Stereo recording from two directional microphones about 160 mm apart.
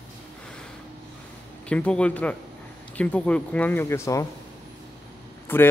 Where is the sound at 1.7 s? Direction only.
5° left (ahead or behind).